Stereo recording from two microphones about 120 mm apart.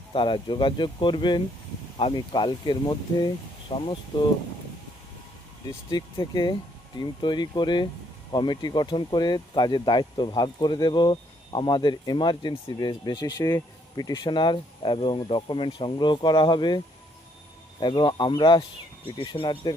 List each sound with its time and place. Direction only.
0.1 s speech: 45° left (ahead or behind)
5.9 s speech: 40° left (ahead or behind)